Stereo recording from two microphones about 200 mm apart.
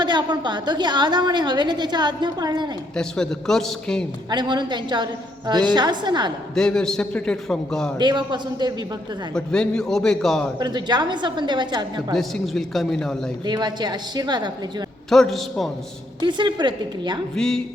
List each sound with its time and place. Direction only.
0.0 s a woman's voice: 20° right (ahead or behind)
2.9 s a man's voice: 5° left (ahead or behind)
4.3 s a woman's voice: 20° right (ahead or behind)
6.5 s a man's voice: 5° left (ahead or behind)
7.9 s a woman's voice: 20° right (ahead or behind)
9.3 s a man's voice: 5° left (ahead or behind)
10.6 s a woman's voice: 20° right (ahead or behind)
12.1 s a man's voice: centre (ahead or behind)
13.4 s a woman's voice: 20° right (ahead or behind)
15.1 s a man's voice: centre (ahead or behind)
16.2 s a woman's voice: 25° right (ahead or behind)
17.3 s a man's voice: centre (ahead or behind)